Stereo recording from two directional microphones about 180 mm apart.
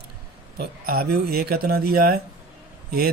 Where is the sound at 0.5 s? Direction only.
60° right (ahead or behind).